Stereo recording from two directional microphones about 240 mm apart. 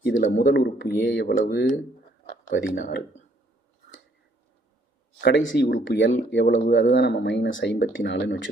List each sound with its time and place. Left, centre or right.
0.0 s speech: left
2.5 s speech: left
5.2 s speech: left